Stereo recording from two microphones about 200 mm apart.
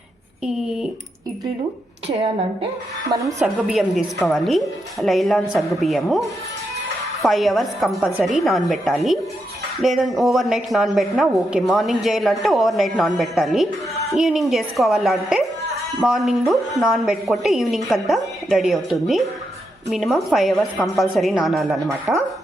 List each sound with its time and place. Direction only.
0.4 s a woman's voice: centre (ahead or behind)
2.0 s a woman's voice: 25° right (ahead or behind)
3.4 s a woman's voice: centre (ahead or behind)